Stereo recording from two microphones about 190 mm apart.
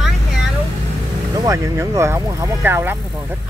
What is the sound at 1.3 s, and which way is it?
Speech, 20° right (ahead or behind).